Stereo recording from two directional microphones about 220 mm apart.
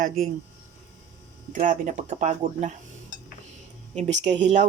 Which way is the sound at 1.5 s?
35° right (ahead or behind).